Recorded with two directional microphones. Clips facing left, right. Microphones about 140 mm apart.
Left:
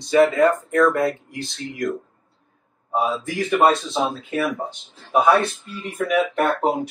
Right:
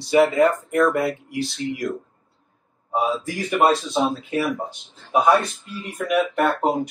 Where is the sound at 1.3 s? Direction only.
20° left (ahead or behind).